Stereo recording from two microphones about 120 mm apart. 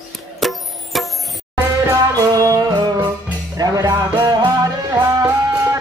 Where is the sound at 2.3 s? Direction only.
30° right (ahead or behind).